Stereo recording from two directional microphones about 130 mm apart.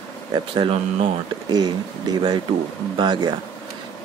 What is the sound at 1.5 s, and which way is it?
Speech, 35° right (ahead or behind).